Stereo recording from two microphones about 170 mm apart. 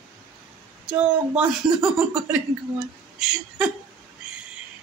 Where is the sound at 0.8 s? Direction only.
5° right (ahead or behind).